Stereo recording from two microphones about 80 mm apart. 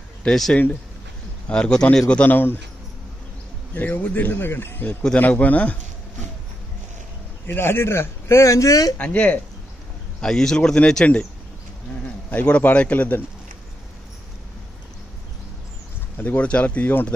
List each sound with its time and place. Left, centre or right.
0.2 s a man's voice: centre
2.3 s speech: left
3.7 s speech: left
5.0 s speech: centre
7.4 s speech: left
8.9 s a man's voice: centre
12.3 s a man's voice: centre
16.2 s speech: centre